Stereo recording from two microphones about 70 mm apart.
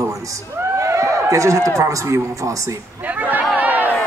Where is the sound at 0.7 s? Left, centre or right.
Right.